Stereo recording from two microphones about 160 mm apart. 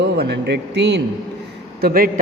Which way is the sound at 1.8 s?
70° right (ahead or behind).